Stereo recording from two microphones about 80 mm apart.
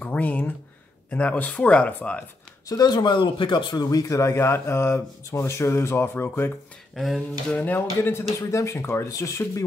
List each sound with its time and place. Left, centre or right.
0.0 s speech: centre
2.7 s speech: left
8.0 s speech: left